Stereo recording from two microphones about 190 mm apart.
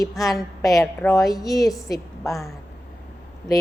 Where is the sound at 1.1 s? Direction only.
20° left (ahead or behind).